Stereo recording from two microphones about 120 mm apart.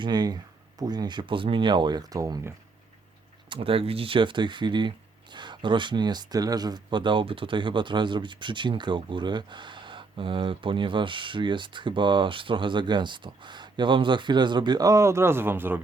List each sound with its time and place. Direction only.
0.0 s speech: 35° right (ahead or behind)
3.5 s speech: 50° right (ahead or behind); by 15.8 s 15° right (ahead or behind)